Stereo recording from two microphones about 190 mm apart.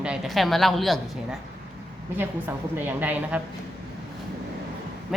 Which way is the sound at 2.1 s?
10° right (ahead or behind).